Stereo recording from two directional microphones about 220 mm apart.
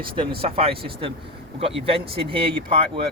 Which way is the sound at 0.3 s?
25° right (ahead or behind).